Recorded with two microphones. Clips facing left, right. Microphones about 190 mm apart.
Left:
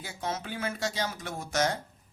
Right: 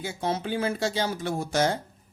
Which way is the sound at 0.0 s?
30° right (ahead or behind).